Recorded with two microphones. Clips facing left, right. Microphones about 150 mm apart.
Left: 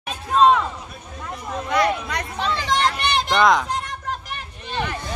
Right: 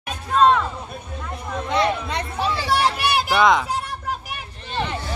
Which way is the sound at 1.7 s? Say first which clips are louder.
Even; 25° right (ahead or behind).